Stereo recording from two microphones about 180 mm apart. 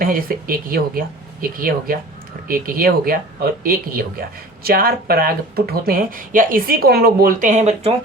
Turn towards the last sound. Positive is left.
turn(degrees=-40)  # may be behind; listen again after turning